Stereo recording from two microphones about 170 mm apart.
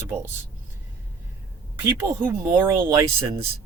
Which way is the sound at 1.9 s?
15° right (ahead or behind).